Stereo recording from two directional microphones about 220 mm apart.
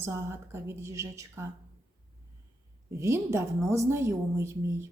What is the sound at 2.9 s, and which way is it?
A woman's voice, 15° right (ahead or behind).